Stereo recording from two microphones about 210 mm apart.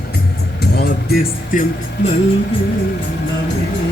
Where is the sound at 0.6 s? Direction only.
50° left (ahead or behind).